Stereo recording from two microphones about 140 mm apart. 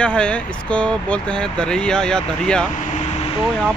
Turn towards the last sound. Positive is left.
turn(degrees=50)  # may be behind; listen again after turning